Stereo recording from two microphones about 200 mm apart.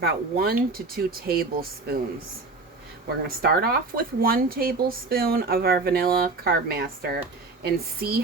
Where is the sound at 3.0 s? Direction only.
50° right (ahead or behind).